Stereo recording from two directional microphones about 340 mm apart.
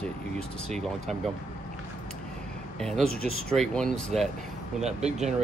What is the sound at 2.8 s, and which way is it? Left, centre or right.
Speech, centre.